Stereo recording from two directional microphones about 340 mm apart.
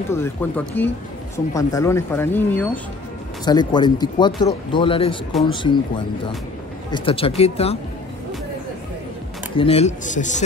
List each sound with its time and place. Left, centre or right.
0.1 s speech: centre
9.6 s speech: centre